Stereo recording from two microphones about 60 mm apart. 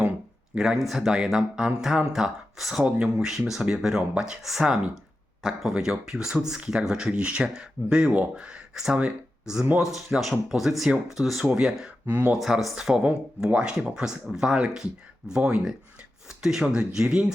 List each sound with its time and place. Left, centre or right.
0.5 s speech: centre
12.0 s speech: right
12.4 s speech: centre
12.7 s speech: centre